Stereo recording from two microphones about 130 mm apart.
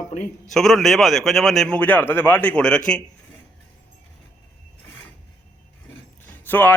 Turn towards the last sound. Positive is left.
turn(degrees=15)  # may be behind; listen again after turning